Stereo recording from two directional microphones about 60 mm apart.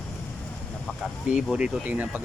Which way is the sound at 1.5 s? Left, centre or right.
Centre.